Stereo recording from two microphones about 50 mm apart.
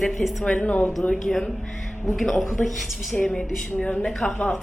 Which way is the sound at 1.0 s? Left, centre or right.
Centre.